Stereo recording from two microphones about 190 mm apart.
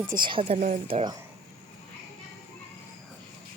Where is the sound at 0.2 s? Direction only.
25° right (ahead or behind).